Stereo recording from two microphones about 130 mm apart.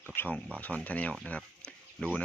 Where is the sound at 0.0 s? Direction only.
15° left (ahead or behind).